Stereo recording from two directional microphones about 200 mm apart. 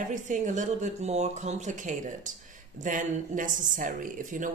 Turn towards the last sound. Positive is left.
turn(degrees=-40)  # may be behind; listen again after turning